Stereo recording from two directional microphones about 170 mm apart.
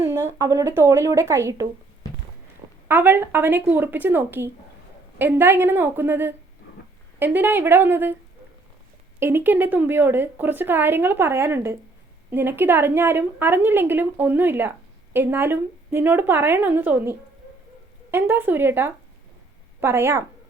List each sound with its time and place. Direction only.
0.0 s a woman's voice: 15° right (ahead or behind)
2.8 s a woman's voice: 10° right (ahead or behind)
9.2 s a woman's voice: 10° right (ahead or behind)